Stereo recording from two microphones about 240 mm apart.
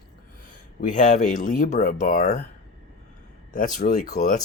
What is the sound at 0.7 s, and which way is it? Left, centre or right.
Speech, left.